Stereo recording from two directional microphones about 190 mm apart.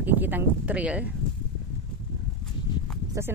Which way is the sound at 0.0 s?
10° right (ahead or behind).